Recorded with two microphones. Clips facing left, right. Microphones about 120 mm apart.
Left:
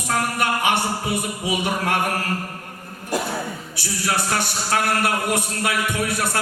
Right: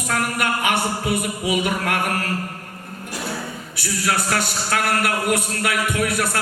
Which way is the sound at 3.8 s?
25° left (ahead or behind).